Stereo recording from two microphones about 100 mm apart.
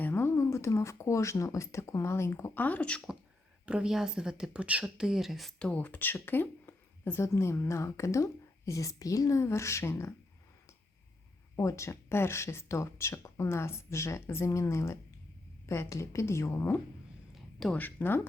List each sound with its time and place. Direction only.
0.0 s speech: 25° left (ahead or behind)
3.7 s speech: 10° right (ahead or behind); by 10.2 s 25° left (ahead or behind)
11.5 s speech: 30° left (ahead or behind)